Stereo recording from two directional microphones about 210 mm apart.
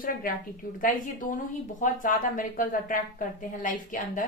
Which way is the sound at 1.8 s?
40° left (ahead or behind).